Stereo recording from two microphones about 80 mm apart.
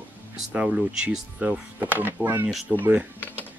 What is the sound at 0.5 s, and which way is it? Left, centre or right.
Speech, centre.